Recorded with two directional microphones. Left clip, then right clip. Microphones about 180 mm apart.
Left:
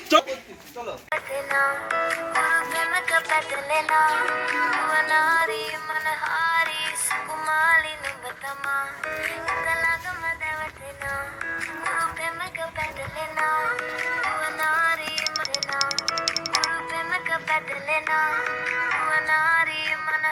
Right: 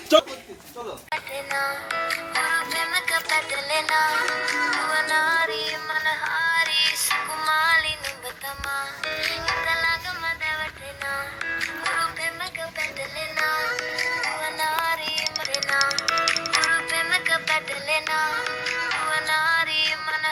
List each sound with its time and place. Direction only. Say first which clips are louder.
1.1 s music: left 3 dB; 35° left (ahead or behind)
9.0 s music: right 2 dB; 20° left (ahead or behind)
15.4 s music: right 3 dB; centre (ahead or behind)
16.6 s music: right 4 dB; 15° left (ahead or behind)